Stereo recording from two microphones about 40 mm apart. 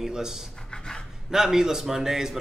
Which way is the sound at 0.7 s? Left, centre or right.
Centre.